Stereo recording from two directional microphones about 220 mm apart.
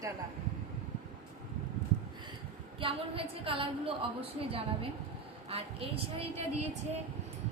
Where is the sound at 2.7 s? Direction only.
25° right (ahead or behind).